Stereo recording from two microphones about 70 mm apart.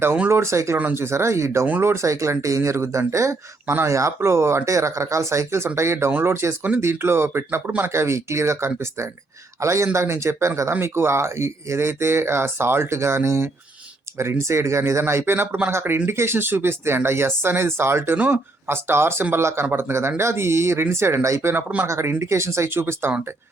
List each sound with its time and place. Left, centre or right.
0.3 s speech: right
0.8 s speech: right
1.0 s speech: right